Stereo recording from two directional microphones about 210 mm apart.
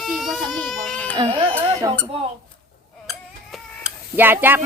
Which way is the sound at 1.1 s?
20° right (ahead or behind).